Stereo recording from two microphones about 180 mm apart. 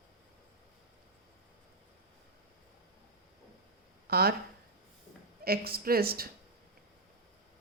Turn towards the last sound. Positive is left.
turn(degrees=-55)  # may be behind; listen again after turning